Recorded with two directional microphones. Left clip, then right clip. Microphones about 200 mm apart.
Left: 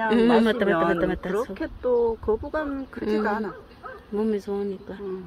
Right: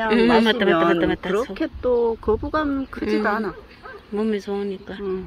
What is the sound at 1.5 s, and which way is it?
Speech, 40° right (ahead or behind).